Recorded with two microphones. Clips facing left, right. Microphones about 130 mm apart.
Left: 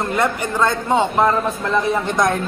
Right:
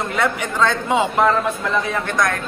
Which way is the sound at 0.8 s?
Centre (ahead or behind).